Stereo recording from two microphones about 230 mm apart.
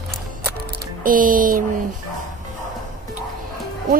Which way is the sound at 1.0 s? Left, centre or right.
Right.